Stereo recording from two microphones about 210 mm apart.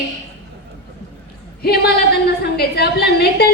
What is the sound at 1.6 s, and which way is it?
A woman's voice, 50° left (ahead or behind).